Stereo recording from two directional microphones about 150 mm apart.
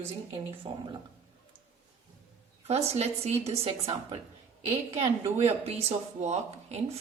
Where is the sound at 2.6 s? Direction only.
45° right (ahead or behind).